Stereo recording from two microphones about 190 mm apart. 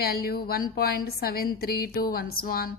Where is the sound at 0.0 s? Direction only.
55° left (ahead or behind).